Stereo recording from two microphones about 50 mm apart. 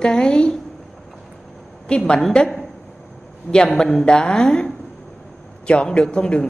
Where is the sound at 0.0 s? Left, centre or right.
Centre.